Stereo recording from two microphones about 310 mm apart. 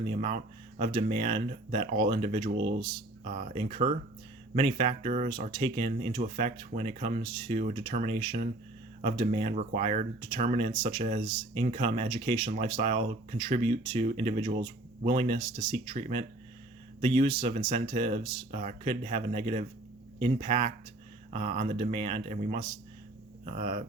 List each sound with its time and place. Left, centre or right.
0.1 s speech: centre
21.3 s speech: right